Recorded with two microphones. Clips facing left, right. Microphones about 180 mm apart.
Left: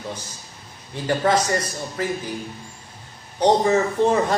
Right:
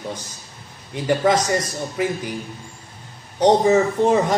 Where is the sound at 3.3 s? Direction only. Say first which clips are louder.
Right 3 dB; 20° right (ahead or behind).